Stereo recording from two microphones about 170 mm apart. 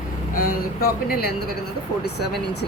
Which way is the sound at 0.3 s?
60° left (ahead or behind).